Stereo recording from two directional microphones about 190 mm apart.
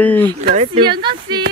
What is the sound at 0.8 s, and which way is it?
Speech, 25° right (ahead or behind).